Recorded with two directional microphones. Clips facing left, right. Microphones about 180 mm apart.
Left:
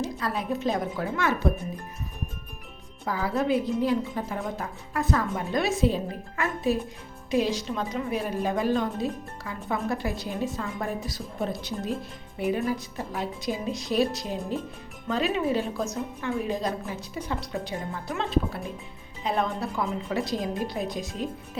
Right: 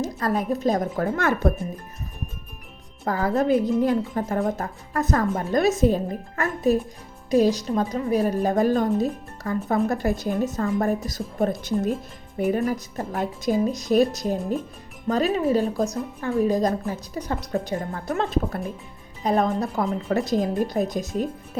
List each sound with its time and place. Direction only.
0.0 s a woman's voice: 45° right (ahead or behind)
3.0 s a woman's voice: 45° right (ahead or behind)